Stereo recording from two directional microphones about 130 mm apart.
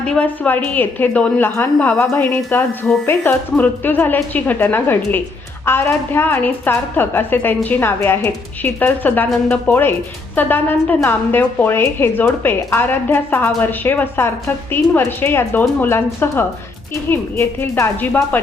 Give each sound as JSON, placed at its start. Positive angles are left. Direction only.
{"t": 0.0, "sound": "a woman's voice", "side_deg": 10}